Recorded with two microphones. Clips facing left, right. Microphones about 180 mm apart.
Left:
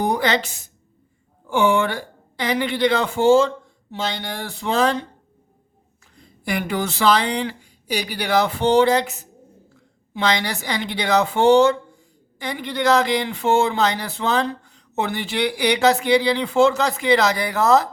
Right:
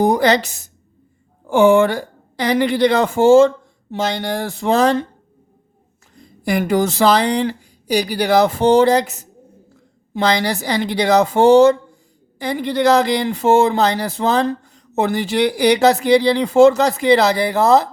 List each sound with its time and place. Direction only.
0.0 s a woman's voice: 40° right (ahead or behind)
6.1 s speech: 40° right (ahead or behind)